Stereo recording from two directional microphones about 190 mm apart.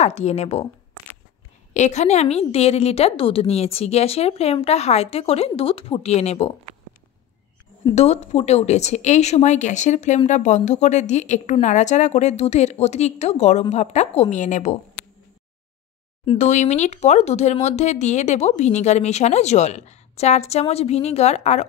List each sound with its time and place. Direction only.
0.0 s speech: 35° left (ahead or behind)
1.7 s speech: 35° left (ahead or behind)
7.9 s speech: 35° left (ahead or behind)
16.3 s speech: 40° left (ahead or behind)